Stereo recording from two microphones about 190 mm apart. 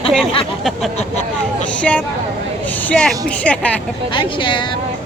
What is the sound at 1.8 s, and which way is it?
Speech, 5° left (ahead or behind).